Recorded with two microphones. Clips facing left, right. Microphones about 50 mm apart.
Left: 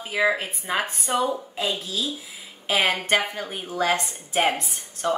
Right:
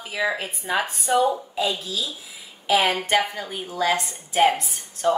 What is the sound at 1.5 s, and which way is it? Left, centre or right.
Speech, left.